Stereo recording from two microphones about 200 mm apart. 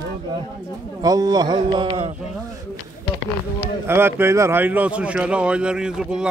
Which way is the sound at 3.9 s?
10° right (ahead or behind).